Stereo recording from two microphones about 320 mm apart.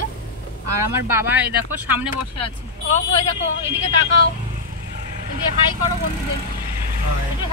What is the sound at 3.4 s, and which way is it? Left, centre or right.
Speech, left.